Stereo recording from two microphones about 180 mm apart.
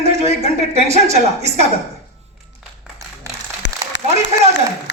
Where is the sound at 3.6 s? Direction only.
80° left.